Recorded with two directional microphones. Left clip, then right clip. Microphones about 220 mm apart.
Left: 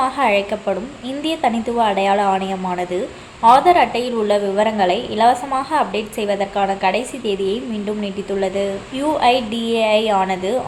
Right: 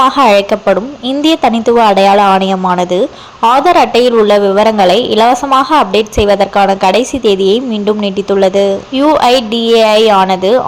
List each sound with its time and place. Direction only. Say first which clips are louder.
0.0 s a woman's voice: right 10 dB; 30° right (ahead or behind)